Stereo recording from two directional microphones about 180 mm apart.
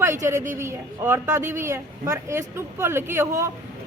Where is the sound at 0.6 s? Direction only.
15° right (ahead or behind).